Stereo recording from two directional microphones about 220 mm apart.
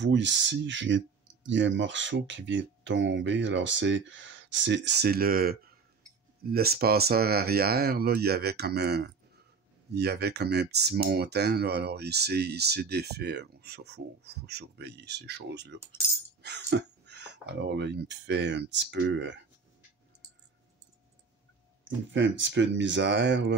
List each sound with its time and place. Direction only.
0.0 s speech: 55° right (ahead or behind)
21.8 s speech: 55° right (ahead or behind)